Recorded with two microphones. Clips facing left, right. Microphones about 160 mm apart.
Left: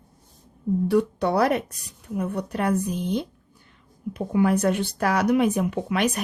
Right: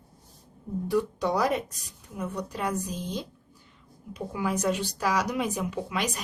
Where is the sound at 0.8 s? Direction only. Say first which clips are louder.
Left 4 dB; 65° left (ahead or behind).